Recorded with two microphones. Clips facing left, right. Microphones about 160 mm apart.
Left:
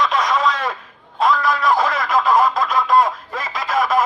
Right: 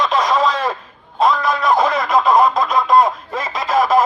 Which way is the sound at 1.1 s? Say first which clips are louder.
Right 2 dB; 20° right (ahead or behind).